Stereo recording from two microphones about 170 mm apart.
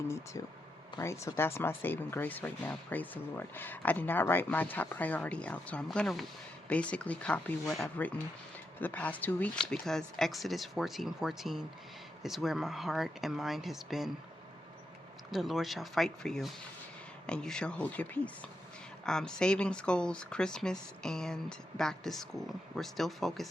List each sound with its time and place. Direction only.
0.4 s speech: 20° left (ahead or behind); by 14.1 s centre (ahead or behind)
15.3 s speech: centre (ahead or behind)